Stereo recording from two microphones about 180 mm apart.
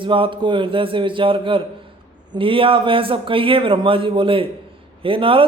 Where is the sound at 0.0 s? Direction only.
30° right (ahead or behind).